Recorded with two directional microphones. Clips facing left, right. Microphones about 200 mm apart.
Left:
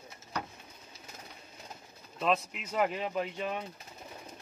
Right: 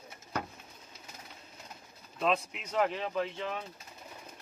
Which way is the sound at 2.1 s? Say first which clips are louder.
Even; centre (ahead or behind).